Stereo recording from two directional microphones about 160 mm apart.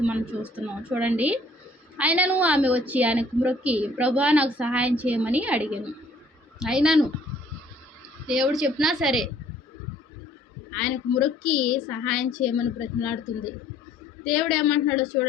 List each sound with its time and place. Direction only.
0.0 s a woman's voice: 10° right (ahead or behind)
8.3 s a woman's voice: 5° right (ahead or behind)
10.7 s a woman's voice: 5° left (ahead or behind)
14.3 s a woman's voice: centre (ahead or behind)